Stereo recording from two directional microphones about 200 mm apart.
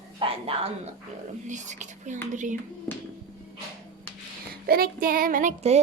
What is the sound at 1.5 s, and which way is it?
Speech, 35° right (ahead or behind).